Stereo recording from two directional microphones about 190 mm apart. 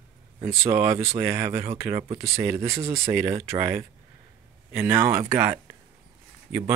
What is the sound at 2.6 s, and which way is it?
Speech, 30° right (ahead or behind).